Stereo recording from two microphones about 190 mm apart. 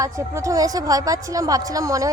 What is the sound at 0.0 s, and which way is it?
A woman's voice, 15° right (ahead or behind).